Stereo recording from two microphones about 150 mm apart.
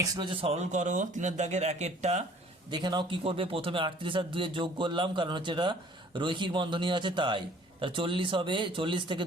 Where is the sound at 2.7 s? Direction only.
30° right (ahead or behind).